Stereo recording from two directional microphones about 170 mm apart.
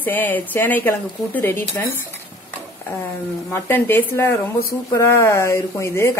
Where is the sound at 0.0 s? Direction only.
10° left (ahead or behind).